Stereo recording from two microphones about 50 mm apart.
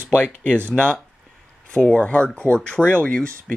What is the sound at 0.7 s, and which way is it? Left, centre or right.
Speech, left.